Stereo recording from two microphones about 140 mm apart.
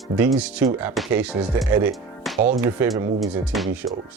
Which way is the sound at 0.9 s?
Centre (ahead or behind).